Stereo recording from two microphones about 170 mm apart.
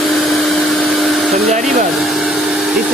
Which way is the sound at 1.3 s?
45° right (ahead or behind).